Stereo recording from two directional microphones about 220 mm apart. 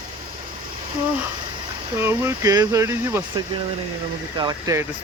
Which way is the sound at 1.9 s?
10° right (ahead or behind).